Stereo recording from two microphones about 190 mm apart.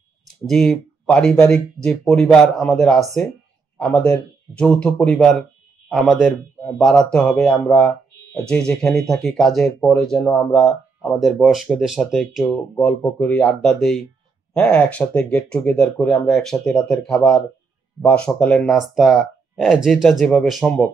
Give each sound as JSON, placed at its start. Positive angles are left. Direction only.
{"t": 0.5, "sound": "speech", "side_deg": 0}